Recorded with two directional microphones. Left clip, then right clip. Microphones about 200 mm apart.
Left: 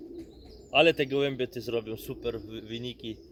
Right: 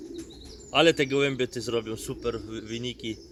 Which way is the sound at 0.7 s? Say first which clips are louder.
Right 1 dB; 15° right (ahead or behind).